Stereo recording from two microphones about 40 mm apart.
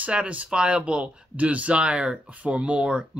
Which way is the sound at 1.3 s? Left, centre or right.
Right.